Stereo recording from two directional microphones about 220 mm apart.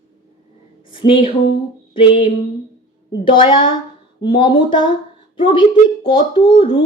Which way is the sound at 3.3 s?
25° left (ahead or behind).